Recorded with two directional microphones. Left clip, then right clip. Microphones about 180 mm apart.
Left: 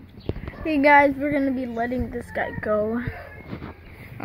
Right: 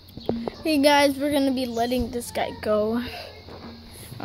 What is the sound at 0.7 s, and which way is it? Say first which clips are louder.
A woman's voice: left 3 dB; 30° right (ahead or behind).